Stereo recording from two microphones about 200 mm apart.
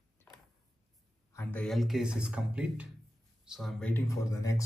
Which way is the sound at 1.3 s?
5° left (ahead or behind).